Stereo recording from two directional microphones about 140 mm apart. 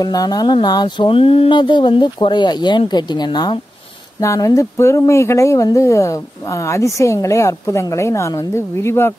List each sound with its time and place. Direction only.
0.0 s speech: 25° left (ahead or behind)